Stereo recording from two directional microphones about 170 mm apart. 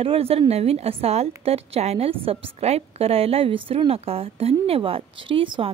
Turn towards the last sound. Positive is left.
turn(degrees=-30)  # may be behind; listen again after turning